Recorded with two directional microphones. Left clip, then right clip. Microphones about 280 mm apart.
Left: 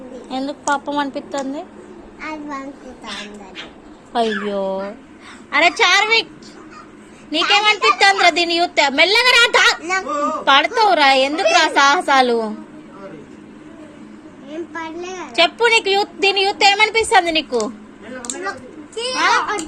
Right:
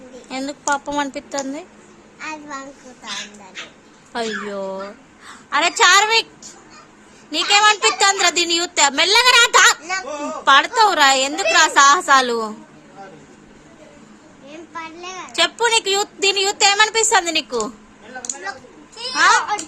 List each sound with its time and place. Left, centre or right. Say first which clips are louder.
0.3 s a woman's voice: left 2 dB; right
0.6 s speech: left 1 dB; centre
2.2 s a child's voice: left 2 dB; centre
4.1 s a child's voice: left 5 dB; centre
7.3 s a child's voice: even; centre
9.8 s a child's voice: left 5 dB; centre
14.7 s a child's voice: even; centre
19.2 s a child's voice: right 2 dB; centre